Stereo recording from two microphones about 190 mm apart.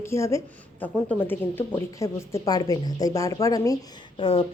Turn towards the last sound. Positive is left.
turn(degrees=30)  # may be behind; listen again after turning